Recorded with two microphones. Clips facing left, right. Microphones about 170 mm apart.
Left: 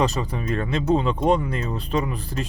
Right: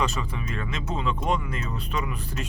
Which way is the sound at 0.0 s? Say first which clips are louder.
Left 5 dB; 35° left (ahead or behind).